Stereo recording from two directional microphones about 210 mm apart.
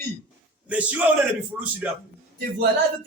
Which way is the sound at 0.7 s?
5° right (ahead or behind).